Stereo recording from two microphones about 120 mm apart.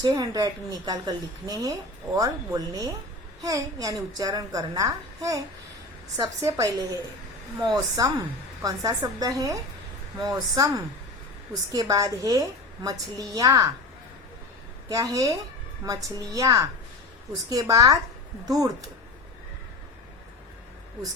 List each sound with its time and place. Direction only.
0.0 s a woman's voice: 30° right (ahead or behind)
14.8 s a woman's voice: 30° right (ahead or behind)